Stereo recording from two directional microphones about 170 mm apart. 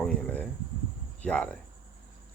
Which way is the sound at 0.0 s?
10° left (ahead or behind).